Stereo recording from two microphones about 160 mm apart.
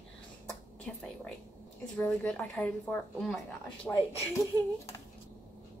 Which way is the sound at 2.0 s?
10° left (ahead or behind).